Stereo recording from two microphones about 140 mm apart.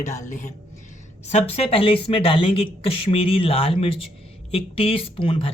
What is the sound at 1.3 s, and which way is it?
Speech, 50° left (ahead or behind).